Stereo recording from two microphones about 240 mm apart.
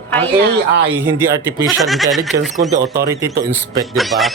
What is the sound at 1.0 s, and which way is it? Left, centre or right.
Speech, centre.